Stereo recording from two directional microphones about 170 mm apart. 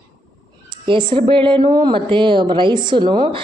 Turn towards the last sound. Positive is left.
turn(degrees=-30)  # may be behind; listen again after turning